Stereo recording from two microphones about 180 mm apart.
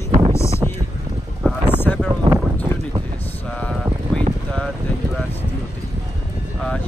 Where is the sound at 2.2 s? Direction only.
35° right (ahead or behind).